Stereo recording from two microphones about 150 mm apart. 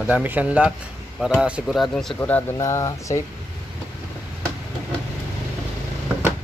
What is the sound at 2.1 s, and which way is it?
Speech, 10° left (ahead or behind).